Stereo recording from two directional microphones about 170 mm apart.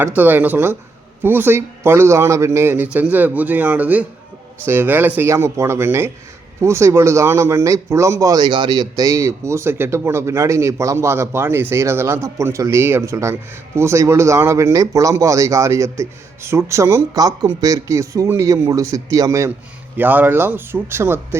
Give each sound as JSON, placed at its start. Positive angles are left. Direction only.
{"t": 0.2, "sound": "a man's voice", "side_deg": -10}